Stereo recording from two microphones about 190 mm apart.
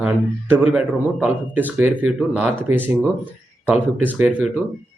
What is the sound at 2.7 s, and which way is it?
Speech, 90° right.